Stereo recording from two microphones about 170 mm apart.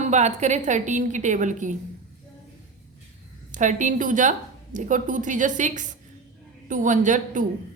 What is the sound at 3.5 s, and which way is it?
A woman's voice, 45° right (ahead or behind).